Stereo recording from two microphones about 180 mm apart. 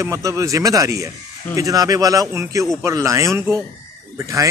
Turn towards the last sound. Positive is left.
turn(degrees=-15)  # may be behind; listen again after turning